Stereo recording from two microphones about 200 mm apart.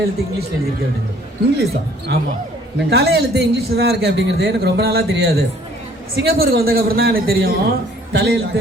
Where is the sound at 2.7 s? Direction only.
55° right (ahead or behind).